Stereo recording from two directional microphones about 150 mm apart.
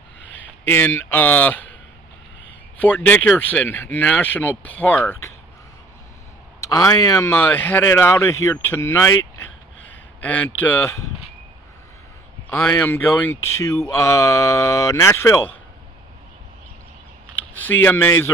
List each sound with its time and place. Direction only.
0.4 s speech: 10° left (ahead or behind)
2.8 s speech: 10° left (ahead or behind)
6.7 s speech: 20° left (ahead or behind)
10.2 s speech: 10° left (ahead or behind)
12.4 s speech: 15° left (ahead or behind)
17.6 s speech: 15° left (ahead or behind)